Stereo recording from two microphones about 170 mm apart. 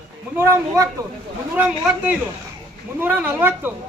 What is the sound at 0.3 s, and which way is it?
A man's voice, 15° right (ahead or behind).